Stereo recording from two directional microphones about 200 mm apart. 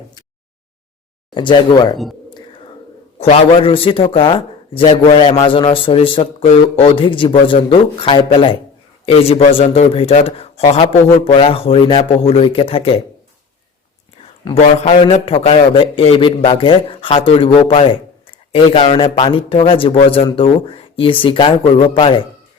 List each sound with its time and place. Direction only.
1.3 s speech: 25° left (ahead or behind)
3.2 s speech: 30° left (ahead or behind)
14.5 s speech: 30° left (ahead or behind)